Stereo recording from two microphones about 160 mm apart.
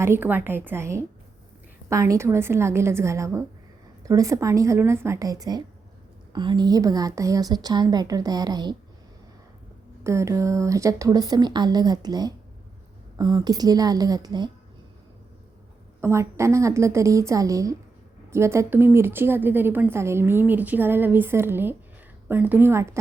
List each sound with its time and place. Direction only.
0.0 s a woman's voice: 15° right (ahead or behind)
10.0 s a woman's voice: 20° right (ahead or behind)
16.0 s a woman's voice: 15° right (ahead or behind)